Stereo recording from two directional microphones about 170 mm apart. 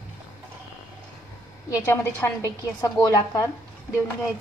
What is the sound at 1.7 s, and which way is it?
A woman's voice, 15° left (ahead or behind).